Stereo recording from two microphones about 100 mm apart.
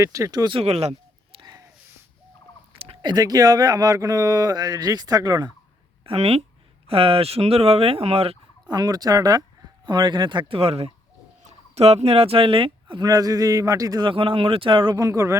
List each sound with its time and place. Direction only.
0.0 s speech: 30° right (ahead or behind)
0.5 s speech: 90° right
1.4 s a sound: 45° right (ahead or behind)
3.0 s speech: 45° right (ahead or behind)
6.1 s speech: 80° right
6.8 s speech: 70° right (ahead or behind)
8.7 s speech: 40° right (ahead or behind)
9.8 s speech: 50° right (ahead or behind)
10.6 s speech: 85° right; by 13.0 s 65° right (ahead or behind)
13.0 s speech: 40° right (ahead or behind)
14.1 s speech: 60° right (ahead or behind)
14.9 s speech: 30° right (ahead or behind)